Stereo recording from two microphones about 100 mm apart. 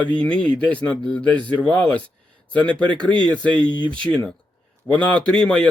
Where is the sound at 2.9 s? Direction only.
50° right (ahead or behind).